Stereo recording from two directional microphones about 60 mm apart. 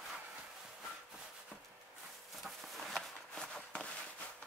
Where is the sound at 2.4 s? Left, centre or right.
Centre.